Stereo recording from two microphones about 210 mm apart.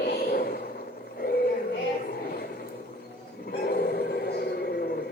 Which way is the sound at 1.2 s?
45° left (ahead or behind).